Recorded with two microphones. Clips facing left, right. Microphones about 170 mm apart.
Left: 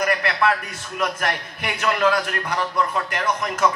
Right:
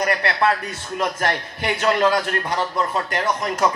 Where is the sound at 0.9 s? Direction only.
30° right (ahead or behind).